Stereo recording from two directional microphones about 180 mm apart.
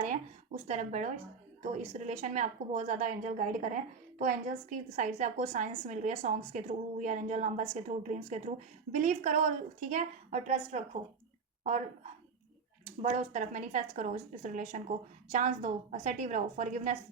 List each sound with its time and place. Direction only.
0.0 s a sound: 40° right (ahead or behind)
1.6 s speech: 40° right (ahead or behind)
12.8 s a woman's voice: 40° right (ahead or behind)